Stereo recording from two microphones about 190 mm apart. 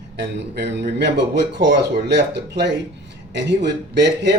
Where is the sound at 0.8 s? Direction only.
65° right (ahead or behind).